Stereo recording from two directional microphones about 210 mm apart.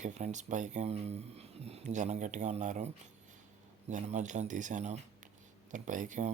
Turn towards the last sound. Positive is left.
turn(degrees=-35)  # may be behind; listen again after turning